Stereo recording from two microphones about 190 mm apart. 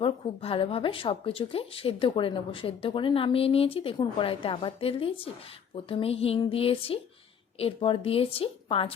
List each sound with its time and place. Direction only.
0.0 s speech: 30° left (ahead or behind)